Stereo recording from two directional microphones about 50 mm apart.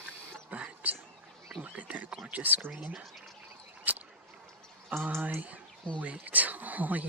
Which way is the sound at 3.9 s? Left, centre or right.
Right.